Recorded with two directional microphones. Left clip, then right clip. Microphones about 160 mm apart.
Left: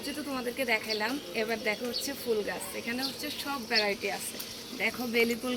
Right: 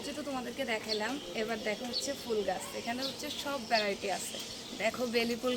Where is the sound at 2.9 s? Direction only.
25° right (ahead or behind).